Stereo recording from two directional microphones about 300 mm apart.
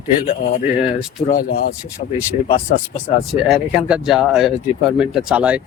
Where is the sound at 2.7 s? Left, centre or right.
Left.